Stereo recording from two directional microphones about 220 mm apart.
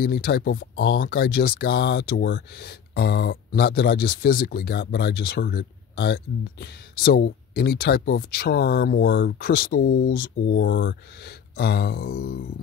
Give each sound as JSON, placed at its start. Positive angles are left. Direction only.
{"t": 0.0, "sound": "speech", "side_deg": 40}
{"t": 0.9, "sound": "speech", "side_deg": 40}